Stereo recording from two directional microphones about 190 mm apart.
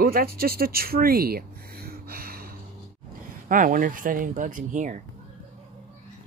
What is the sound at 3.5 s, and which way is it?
Speech, 45° right (ahead or behind).